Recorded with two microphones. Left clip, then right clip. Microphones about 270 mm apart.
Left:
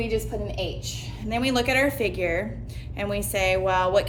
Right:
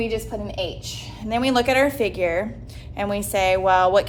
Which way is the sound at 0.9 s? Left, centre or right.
Centre.